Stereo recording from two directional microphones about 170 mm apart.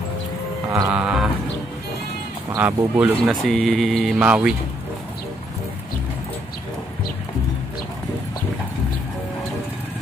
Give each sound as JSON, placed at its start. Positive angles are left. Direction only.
{"t": 0.7, "sound": "speech", "side_deg": -15}
{"t": 0.9, "sound": "speech", "side_deg": -5}
{"t": 2.5, "sound": "speech", "side_deg": -10}
{"t": 3.2, "sound": "speech", "side_deg": 0}